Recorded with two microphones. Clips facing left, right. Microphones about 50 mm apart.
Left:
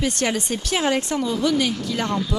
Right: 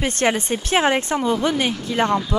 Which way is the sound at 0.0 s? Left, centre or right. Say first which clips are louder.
Right 3 dB; right.